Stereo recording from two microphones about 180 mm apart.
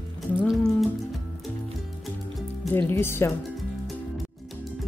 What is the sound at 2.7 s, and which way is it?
Speech, 10° left (ahead or behind).